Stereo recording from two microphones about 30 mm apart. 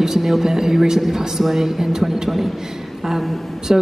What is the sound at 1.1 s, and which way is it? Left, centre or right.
A woman's voice, centre.